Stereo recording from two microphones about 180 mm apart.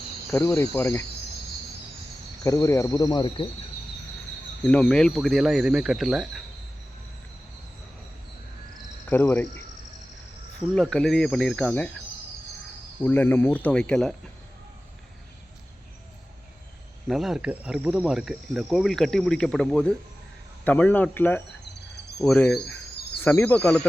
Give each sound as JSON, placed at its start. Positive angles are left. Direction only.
{"t": 0.3, "sound": "speech", "side_deg": 15}
{"t": 2.4, "sound": "speech", "side_deg": 15}
{"t": 4.6, "sound": "cricket", "side_deg": 5}
{"t": 9.0, "sound": "cricket", "side_deg": 10}
{"t": 10.8, "sound": "cricket", "side_deg": 0}
{"t": 13.0, "sound": "speech", "side_deg": 10}
{"t": 17.1, "sound": "cricket", "side_deg": 0}
{"t": 20.7, "sound": "speech", "side_deg": 10}
{"t": 22.2, "sound": "cricket", "side_deg": 5}
{"t": 23.2, "sound": "speech", "side_deg": 10}